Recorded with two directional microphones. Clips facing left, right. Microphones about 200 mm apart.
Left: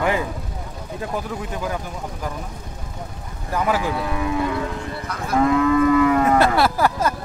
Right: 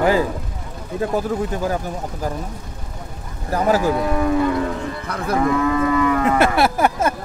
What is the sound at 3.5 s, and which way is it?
Speech, 40° right (ahead or behind).